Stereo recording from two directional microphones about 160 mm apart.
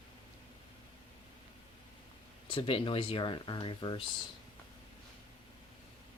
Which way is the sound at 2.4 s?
35° left (ahead or behind).